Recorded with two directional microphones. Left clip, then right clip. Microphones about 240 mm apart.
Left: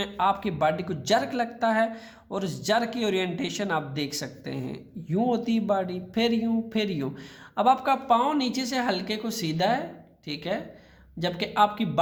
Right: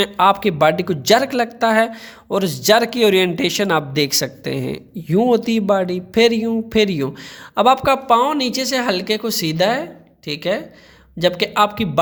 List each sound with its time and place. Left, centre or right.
0.0 s a woman's voice: right